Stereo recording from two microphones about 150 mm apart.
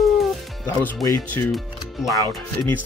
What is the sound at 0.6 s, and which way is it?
Speech, 20° left (ahead or behind).